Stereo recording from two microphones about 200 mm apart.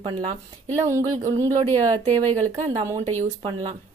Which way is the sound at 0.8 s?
15° right (ahead or behind).